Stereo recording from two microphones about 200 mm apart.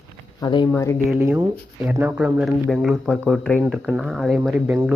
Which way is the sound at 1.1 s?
10° right (ahead or behind).